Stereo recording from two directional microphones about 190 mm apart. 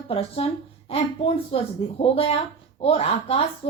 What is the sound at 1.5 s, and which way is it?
Speech, 30° left (ahead or behind).